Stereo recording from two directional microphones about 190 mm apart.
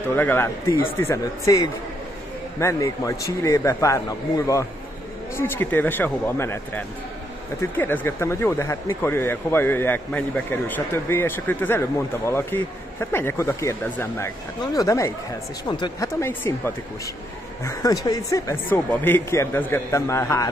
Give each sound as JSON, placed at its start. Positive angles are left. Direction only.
{"t": 0.1, "sound": "speech", "side_deg": 10}
{"t": 2.6, "sound": "speech", "side_deg": 15}
{"t": 5.3, "sound": "speech", "side_deg": 10}
{"t": 16.2, "sound": "speech", "side_deg": 15}